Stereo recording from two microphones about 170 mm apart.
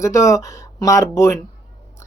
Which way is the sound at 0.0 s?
20° left (ahead or behind).